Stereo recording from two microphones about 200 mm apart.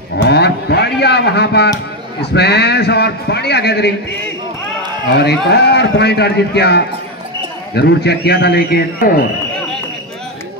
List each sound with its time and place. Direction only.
0.2 s a sound: 55° left (ahead or behind)
2.3 s a man's voice: 55° left (ahead or behind)
5.1 s a man's voice: 55° left (ahead or behind)